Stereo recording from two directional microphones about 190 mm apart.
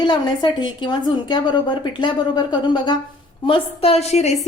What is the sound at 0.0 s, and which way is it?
A woman's voice, 25° left (ahead or behind).